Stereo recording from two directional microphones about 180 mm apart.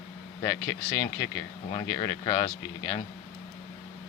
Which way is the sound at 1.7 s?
25° left (ahead or behind).